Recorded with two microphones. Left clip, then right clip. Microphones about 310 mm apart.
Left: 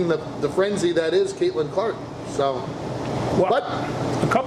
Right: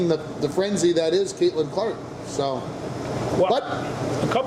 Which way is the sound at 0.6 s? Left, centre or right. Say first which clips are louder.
Even; right.